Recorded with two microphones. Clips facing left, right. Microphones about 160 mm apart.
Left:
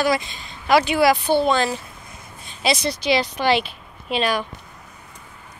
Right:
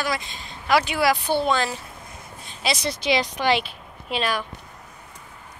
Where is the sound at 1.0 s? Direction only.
20° left (ahead or behind).